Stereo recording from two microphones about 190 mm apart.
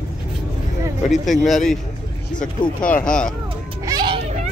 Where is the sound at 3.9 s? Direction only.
25° right (ahead or behind).